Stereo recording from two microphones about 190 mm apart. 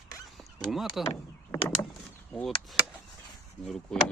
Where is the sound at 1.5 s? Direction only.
15° left (ahead or behind).